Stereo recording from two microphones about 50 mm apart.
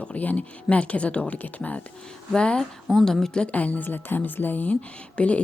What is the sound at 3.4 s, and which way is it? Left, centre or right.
Speech, left.